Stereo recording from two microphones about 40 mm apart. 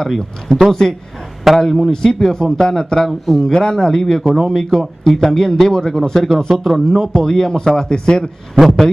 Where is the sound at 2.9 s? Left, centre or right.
Centre.